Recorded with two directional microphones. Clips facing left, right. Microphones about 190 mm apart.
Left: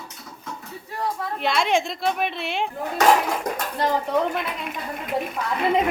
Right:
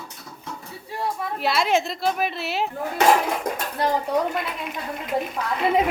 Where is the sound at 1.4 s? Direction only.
5° right (ahead or behind).